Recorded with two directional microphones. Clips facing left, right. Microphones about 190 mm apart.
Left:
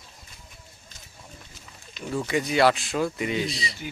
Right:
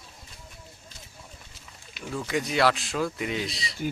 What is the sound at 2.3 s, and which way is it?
Speech, centre (ahead or behind).